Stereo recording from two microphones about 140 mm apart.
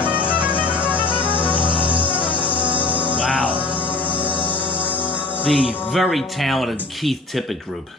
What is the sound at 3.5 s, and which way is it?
Music, 40° left (ahead or behind).